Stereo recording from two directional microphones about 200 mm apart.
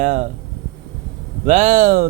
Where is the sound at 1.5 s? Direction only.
35° right (ahead or behind).